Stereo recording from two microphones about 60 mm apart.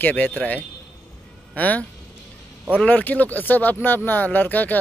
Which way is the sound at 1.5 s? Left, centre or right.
Left.